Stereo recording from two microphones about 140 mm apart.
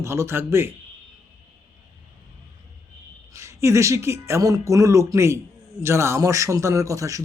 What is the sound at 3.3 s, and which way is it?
A man's voice, 20° right (ahead or behind).